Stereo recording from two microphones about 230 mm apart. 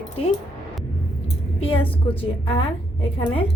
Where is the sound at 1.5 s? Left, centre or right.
Left.